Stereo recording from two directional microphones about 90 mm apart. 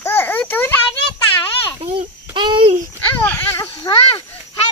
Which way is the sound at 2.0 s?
65° right (ahead or behind).